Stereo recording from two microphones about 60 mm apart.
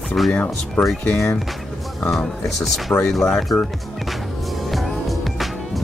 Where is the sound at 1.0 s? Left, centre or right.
Left.